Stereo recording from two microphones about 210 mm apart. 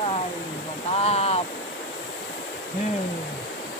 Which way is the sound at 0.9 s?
30° left (ahead or behind).